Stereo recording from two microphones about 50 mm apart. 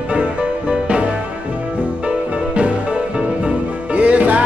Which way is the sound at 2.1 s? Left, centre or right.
Right.